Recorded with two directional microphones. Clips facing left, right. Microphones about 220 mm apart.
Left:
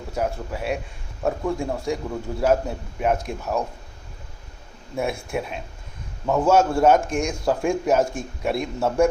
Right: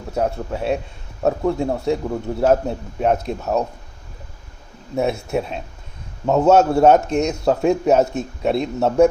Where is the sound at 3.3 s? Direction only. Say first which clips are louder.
Right 5 dB; 20° right (ahead or behind).